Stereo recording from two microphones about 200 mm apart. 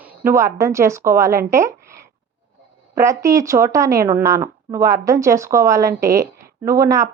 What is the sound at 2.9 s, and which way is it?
A woman's voice, 15° right (ahead or behind).